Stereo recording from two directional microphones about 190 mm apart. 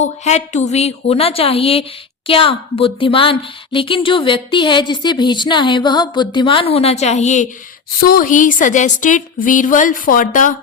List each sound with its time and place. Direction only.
0.0 s a woman's voice: 35° left (ahead or behind)
7.9 s speech: 50° left (ahead or behind)